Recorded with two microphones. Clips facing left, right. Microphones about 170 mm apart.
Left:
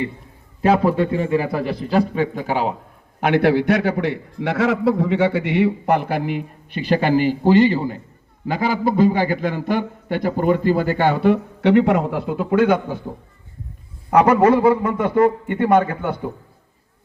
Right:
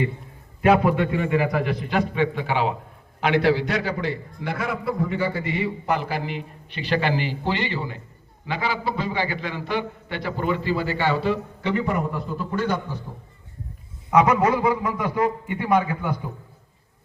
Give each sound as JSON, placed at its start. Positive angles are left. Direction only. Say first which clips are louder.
{"t": 0.6, "sound": "a man's voice", "louder": "left 2 dB", "side_deg": 35}
{"t": 3.2, "sound": "a man's voice", "louder": "left 4 dB", "side_deg": 55}
{"t": 4.4, "sound": "a man's voice", "louder": "left 13 dB", "side_deg": 80}
{"t": 14.1, "sound": "a man's voice", "louder": "left 4 dB", "side_deg": 55}
{"t": 14.5, "sound": "speech", "louder": "left 7 dB", "side_deg": 30}
{"t": 14.8, "sound": "a man's voice", "louder": "left 7 dB", "side_deg": 55}